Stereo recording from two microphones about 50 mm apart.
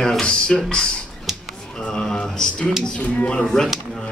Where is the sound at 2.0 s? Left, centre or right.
Centre.